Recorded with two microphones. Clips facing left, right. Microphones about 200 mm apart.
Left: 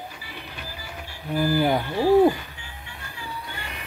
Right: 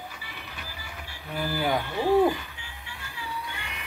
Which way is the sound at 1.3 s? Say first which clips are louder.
Left 6 dB; 40° left (ahead or behind).